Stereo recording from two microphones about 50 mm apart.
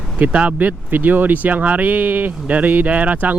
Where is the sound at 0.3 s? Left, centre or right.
Right.